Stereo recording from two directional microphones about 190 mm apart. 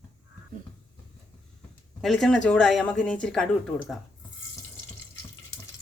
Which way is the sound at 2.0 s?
Centre (ahead or behind).